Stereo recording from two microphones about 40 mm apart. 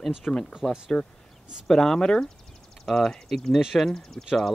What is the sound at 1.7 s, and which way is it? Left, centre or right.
Speech, centre.